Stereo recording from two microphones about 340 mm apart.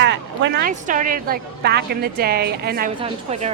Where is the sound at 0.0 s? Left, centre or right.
Right.